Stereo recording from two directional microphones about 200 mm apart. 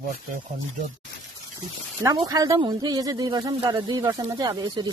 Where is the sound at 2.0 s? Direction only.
15° right (ahead or behind).